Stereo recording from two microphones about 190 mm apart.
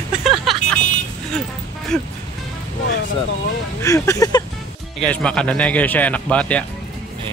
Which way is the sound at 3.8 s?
15° left (ahead or behind).